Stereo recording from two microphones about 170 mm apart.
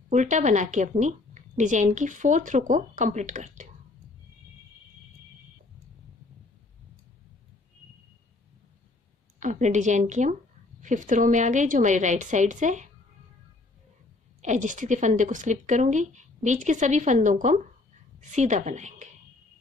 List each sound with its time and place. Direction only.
0.1 s a woman's voice: 45° right (ahead or behind)
9.4 s a woman's voice: 45° right (ahead or behind)
14.4 s a woman's voice: 45° right (ahead or behind)